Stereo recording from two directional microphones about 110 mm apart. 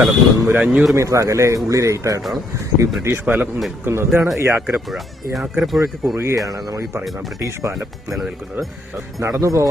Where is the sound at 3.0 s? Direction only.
20° right (ahead or behind).